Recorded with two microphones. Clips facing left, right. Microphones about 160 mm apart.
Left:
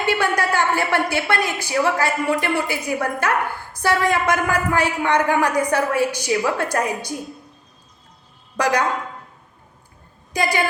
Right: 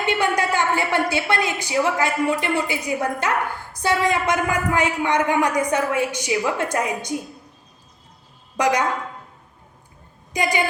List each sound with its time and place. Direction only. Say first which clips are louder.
0.0 s a woman's voice: left 1 dB; 20° right (ahead or behind)
8.5 s a woman's voice: even; 20° right (ahead or behind)
10.3 s a woman's voice: left 1 dB; 15° right (ahead or behind)